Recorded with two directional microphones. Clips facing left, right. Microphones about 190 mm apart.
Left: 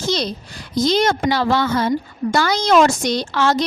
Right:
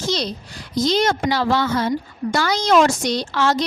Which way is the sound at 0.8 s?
55° left (ahead or behind).